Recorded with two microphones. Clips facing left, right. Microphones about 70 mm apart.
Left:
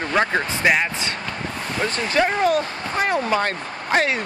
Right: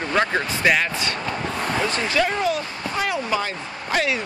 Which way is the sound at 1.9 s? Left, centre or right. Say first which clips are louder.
Left 5 dB; left.